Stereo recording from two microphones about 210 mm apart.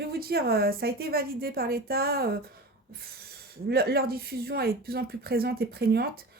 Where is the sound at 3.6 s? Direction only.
50° right (ahead or behind).